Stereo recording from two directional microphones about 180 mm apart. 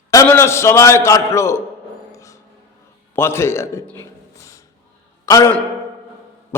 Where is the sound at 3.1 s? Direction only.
15° left (ahead or behind).